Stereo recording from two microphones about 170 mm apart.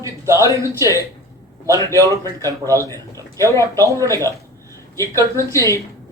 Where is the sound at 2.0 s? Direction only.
20° right (ahead or behind).